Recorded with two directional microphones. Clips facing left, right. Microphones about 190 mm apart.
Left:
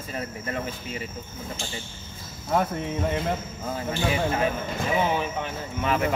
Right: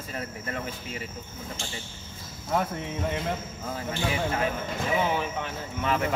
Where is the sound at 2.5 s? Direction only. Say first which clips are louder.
Left 3 dB; 45° left (ahead or behind).